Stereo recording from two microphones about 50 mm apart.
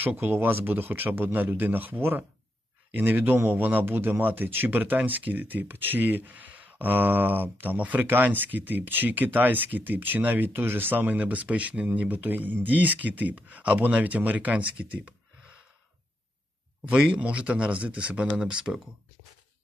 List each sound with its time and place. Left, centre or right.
0.4 s speech: right
16.9 s speech: right